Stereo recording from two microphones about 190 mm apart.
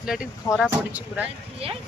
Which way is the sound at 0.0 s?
5° right (ahead or behind).